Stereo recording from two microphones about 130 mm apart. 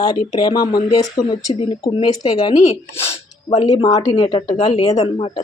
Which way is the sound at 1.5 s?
40° left (ahead or behind).